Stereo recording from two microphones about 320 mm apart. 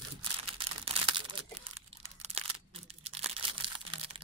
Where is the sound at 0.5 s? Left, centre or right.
Centre.